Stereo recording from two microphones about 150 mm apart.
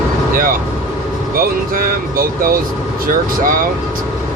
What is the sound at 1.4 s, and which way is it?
Speech, 70° right (ahead or behind).